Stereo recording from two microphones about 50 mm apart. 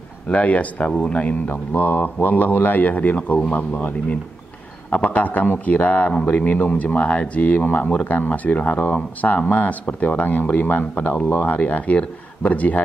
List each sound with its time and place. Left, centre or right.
0.3 s speech: left
1.5 s speech: left